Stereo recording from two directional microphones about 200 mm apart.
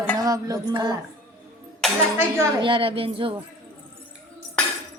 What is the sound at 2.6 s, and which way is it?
Speech, 25° right (ahead or behind).